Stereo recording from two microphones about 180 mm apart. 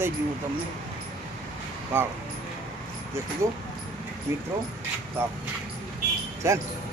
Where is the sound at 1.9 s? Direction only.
10° right (ahead or behind).